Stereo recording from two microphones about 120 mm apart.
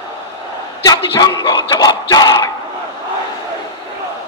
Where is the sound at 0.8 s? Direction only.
35° left (ahead or behind).